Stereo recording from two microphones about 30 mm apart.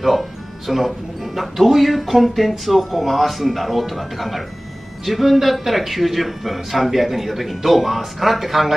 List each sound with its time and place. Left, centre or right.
0.0 s speech: centre